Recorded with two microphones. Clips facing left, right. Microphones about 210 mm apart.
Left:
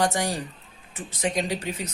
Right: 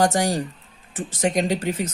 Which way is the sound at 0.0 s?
45° right (ahead or behind).